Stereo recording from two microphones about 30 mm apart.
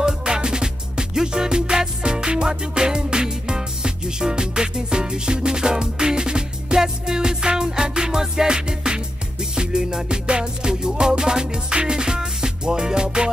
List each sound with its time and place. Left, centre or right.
0.0 s music: right